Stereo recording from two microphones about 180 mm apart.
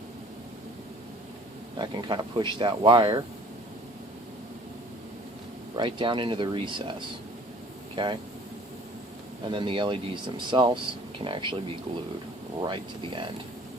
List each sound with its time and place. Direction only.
1.8 s speech: 25° right (ahead or behind)
5.7 s speech: 25° right (ahead or behind)
7.9 s speech: 30° right (ahead or behind)
9.5 s speech: 25° right (ahead or behind)
12.6 s speech: 25° right (ahead or behind)